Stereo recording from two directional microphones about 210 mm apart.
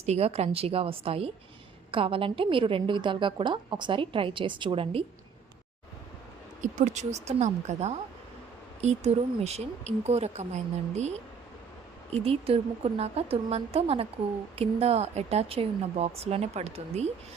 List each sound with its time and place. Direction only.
0.0 s a woman's voice: 30° right (ahead or behind)
6.6 s speech: 35° right (ahead or behind)
12.2 s a woman's voice: 30° right (ahead or behind)